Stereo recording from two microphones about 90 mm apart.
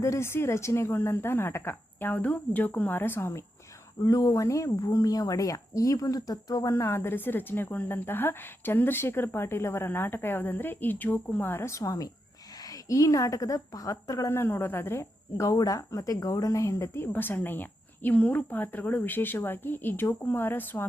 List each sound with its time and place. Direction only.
0.0 s speech: 30° left (ahead or behind)
4.0 s a woman's voice: 40° left (ahead or behind)
14.3 s speech: 25° left (ahead or behind)